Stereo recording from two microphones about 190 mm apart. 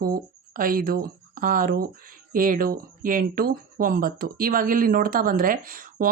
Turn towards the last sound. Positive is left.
turn(degrees=-50)  # may be behind; listen again after turning